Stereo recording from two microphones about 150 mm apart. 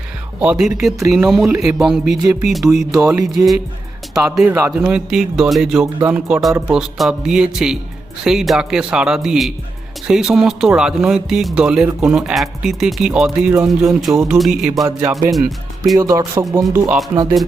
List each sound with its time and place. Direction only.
0.3 s speech: 5° right (ahead or behind)
14.8 s music: 20° right (ahead or behind)
15.3 s speech: centre (ahead or behind)
16.0 s speech: 20° right (ahead or behind)
16.7 s music: 15° right (ahead or behind)